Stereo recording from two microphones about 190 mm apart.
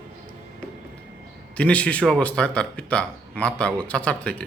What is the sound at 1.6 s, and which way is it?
Speech, 5° left (ahead or behind).